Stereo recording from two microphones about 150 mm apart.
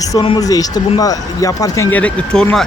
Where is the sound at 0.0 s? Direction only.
25° left (ahead or behind).